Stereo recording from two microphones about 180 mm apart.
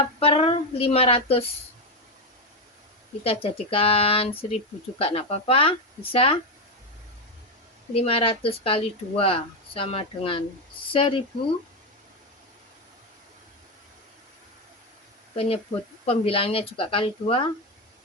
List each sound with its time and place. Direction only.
0.2 s a sound: 30° left (ahead or behind)
3.2 s speech: 30° left (ahead or behind)
7.9 s speech: 30° left (ahead or behind)
15.4 s speech: 30° left (ahead or behind)